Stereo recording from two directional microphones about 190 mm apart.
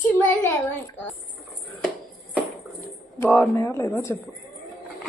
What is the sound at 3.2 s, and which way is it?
Speech, 10° left (ahead or behind).